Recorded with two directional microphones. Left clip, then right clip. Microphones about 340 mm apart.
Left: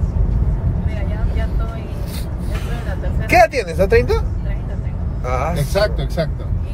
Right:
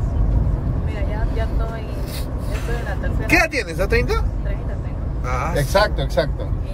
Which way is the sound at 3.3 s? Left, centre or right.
Centre.